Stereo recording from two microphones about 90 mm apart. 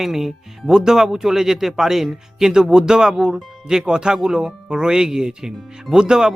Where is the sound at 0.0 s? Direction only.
5° right (ahead or behind).